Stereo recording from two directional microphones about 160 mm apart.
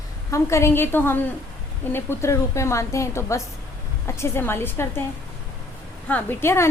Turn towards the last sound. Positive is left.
turn(degrees=15)  # may be behind; listen again after turning